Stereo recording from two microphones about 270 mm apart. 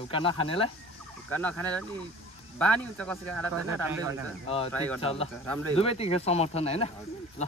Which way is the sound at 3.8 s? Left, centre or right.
Centre.